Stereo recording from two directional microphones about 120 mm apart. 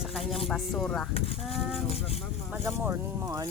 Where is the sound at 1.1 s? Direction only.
55° left (ahead or behind).